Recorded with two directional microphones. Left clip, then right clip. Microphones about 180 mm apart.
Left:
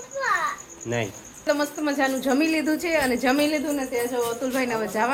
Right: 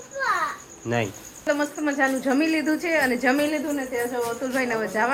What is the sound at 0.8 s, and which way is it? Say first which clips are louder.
Speech: right 2 dB; 30° right (ahead or behind).